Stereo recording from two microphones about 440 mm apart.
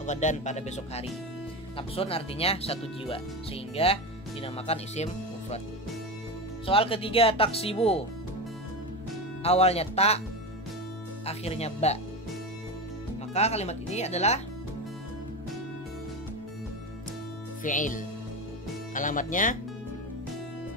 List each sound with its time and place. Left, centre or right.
0.0 s speech: centre
6.6 s speech: centre
9.4 s speech: centre
11.2 s speech: centre
13.3 s speech: centre
17.6 s speech: centre